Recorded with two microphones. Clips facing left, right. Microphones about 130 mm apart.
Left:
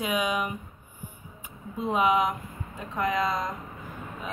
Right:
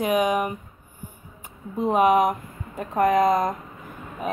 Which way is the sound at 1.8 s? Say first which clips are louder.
Right 6 dB; 50° right (ahead or behind).